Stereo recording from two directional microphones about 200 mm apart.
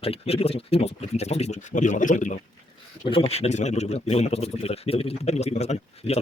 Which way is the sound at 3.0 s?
30° left (ahead or behind).